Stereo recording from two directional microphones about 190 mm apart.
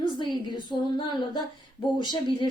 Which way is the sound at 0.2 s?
25° left (ahead or behind).